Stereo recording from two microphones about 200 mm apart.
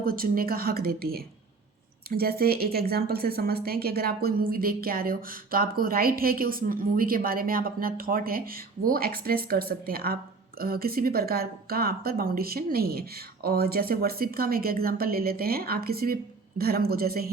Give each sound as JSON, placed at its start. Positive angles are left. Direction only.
{"t": 0.0, "sound": "speech", "side_deg": -45}